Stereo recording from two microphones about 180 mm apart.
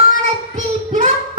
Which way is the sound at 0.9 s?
40° right (ahead or behind).